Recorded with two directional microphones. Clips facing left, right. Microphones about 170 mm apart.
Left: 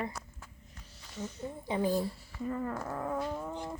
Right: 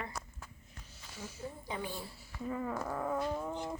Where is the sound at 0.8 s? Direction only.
Centre (ahead or behind).